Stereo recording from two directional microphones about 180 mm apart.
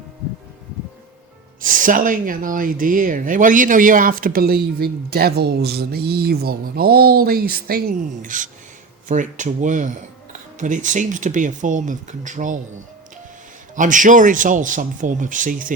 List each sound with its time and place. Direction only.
1.6 s speech: 50° right (ahead or behind)
13.7 s speech: 45° right (ahead or behind)